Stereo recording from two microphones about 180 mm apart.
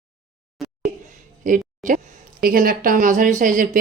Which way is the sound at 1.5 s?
45° right (ahead or behind).